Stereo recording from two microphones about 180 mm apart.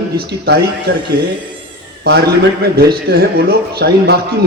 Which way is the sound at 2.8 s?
60° right (ahead or behind).